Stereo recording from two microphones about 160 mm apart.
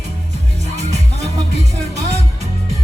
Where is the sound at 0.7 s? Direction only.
45° right (ahead or behind).